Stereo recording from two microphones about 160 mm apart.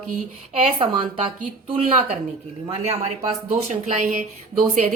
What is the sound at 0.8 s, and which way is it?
Speech, 35° right (ahead or behind).